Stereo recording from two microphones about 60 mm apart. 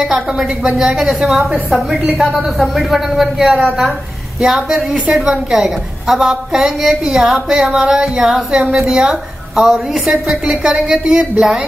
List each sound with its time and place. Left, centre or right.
0.0 s a woman's voice: centre